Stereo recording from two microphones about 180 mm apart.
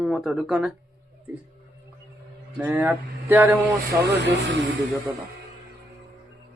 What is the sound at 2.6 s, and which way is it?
Speech, 10° right (ahead or behind).